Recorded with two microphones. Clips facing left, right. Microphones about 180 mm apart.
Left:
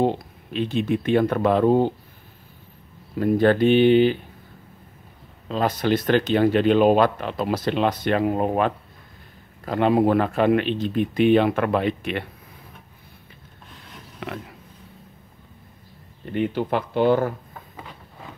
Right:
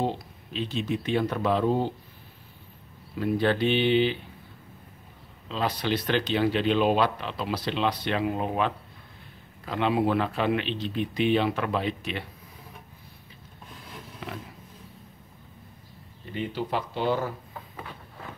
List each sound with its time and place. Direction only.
0.0 s speech: 55° left (ahead or behind)
3.2 s speech: 45° left (ahead or behind)
5.5 s speech: 45° left (ahead or behind)
14.2 s pig: 65° left (ahead or behind)
16.3 s speech: 55° left (ahead or behind)